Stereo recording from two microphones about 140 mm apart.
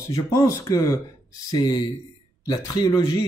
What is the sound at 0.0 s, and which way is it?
Speech, 25° left (ahead or behind).